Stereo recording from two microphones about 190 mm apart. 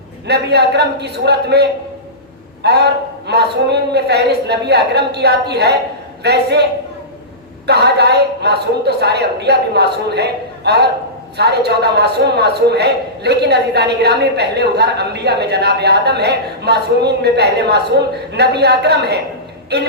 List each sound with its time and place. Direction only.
0.3 s a man's voice: 60° right (ahead or behind)
2.6 s a man's voice: 60° right (ahead or behind)
7.7 s a man's voice: 60° right (ahead or behind)